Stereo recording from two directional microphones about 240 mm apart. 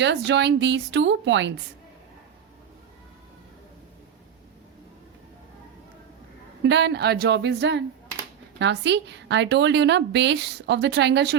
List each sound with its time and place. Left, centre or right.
0.0 s a woman's voice: right
6.6 s a woman's voice: right